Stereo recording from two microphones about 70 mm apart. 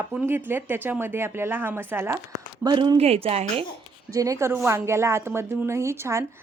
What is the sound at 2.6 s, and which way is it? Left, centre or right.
Speech, right.